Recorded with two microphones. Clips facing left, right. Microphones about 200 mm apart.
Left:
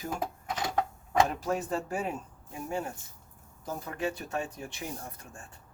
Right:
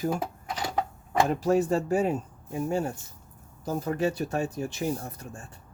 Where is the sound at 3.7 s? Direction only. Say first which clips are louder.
Right 7 dB; 40° right (ahead or behind).